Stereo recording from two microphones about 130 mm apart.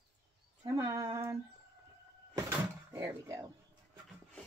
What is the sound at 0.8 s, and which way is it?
Female singing, 25° right (ahead or behind).